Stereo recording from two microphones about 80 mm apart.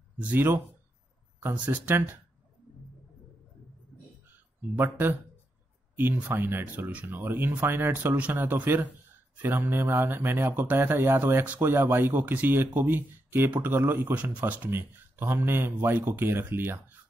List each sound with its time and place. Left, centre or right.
0.2 s speech: right
4.3 s a sound: right
6.2 s speech: right